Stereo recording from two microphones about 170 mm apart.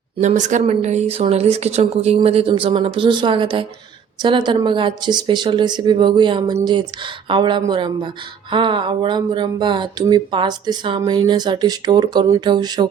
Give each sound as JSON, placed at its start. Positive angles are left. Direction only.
{"t": 0.2, "sound": "speech", "side_deg": -45}